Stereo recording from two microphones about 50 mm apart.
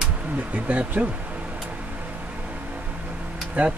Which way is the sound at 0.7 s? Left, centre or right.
Right.